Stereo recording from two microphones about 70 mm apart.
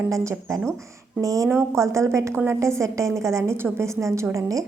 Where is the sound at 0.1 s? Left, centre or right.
Right.